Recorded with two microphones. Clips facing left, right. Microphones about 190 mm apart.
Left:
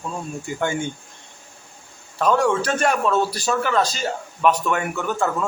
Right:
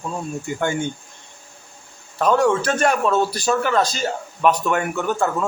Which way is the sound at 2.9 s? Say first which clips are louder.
Right 1 dB; 5° right (ahead or behind).